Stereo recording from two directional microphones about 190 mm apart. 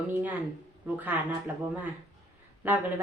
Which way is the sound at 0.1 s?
10° right (ahead or behind).